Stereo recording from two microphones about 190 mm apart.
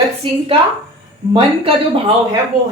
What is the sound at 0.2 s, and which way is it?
Speech, 25° right (ahead or behind).